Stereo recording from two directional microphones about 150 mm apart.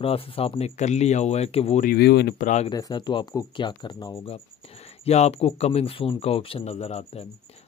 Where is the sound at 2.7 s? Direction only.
25° left (ahead or behind).